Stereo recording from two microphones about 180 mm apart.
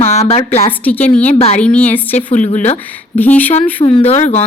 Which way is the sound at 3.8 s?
30° left (ahead or behind).